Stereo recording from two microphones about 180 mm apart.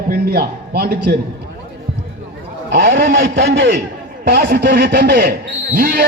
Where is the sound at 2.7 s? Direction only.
70° right (ahead or behind).